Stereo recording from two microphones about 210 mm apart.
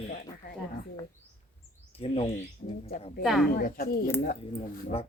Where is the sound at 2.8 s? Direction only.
30° left (ahead or behind).